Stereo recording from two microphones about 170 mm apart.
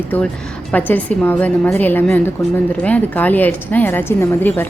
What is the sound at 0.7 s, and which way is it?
A woman's voice, 10° left (ahead or behind).